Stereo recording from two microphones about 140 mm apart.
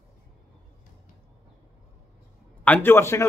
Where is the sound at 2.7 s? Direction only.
15° left (ahead or behind).